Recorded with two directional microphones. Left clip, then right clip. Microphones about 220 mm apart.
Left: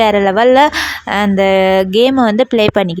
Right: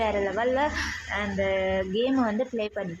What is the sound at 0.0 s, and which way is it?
Speech, 45° left (ahead or behind).